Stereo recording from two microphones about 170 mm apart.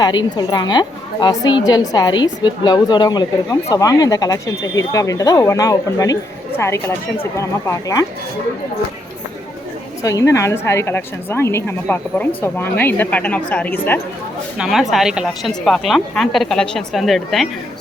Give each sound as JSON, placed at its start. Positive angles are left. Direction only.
{"t": 0.0, "sound": "a woman's voice", "side_deg": 25}
{"t": 10.0, "sound": "a woman's voice", "side_deg": 20}
{"t": 14.6, "sound": "a woman's voice", "side_deg": 0}